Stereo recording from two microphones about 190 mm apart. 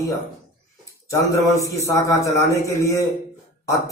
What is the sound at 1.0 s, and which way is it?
A man's voice, 15° left (ahead or behind).